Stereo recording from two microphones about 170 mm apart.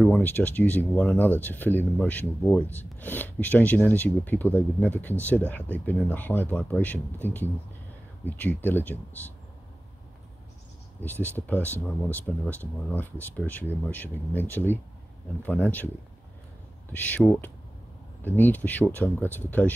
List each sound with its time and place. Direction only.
0.0 s speech: 5° left (ahead or behind)
11.0 s speech: 10° left (ahead or behind)
16.9 s speech: 10° left (ahead or behind)